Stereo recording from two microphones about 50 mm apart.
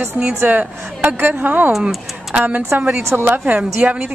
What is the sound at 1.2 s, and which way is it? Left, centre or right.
A woman's voice, right.